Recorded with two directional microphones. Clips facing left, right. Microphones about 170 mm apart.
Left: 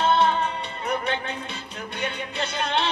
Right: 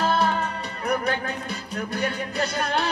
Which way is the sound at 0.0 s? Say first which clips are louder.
Left 2 dB; 25° left (ahead or behind).